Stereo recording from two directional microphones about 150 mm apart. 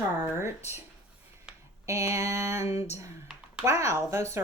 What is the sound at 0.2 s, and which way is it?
Speech, 15° right (ahead or behind).